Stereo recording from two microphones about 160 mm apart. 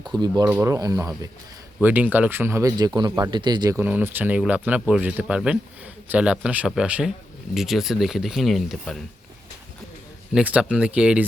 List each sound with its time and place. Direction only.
0.0 s speech: 25° right (ahead or behind)
1.8 s speech: 10° right (ahead or behind)
10.3 s speech: 5° right (ahead or behind)